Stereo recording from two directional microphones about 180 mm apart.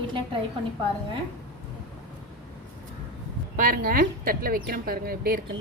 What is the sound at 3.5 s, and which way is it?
Speech, 50° right (ahead or behind).